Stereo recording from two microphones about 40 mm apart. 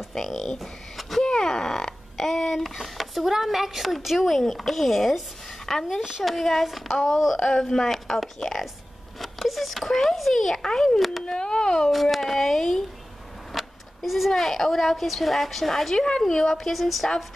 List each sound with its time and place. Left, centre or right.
0.1 s speech: centre
0.6 s a sound: centre
1.2 s speech: centre
7.4 s speech: centre
9.2 s a sound: centre
10.6 s speech: centre
11.9 s speech: centre